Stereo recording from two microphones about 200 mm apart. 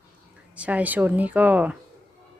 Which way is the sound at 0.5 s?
5° right (ahead or behind).